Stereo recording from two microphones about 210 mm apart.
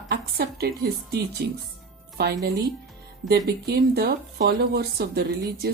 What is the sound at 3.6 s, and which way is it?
A woman's voice, 50° right (ahead or behind).